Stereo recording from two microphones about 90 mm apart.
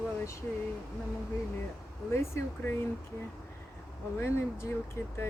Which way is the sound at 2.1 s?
30° left (ahead or behind).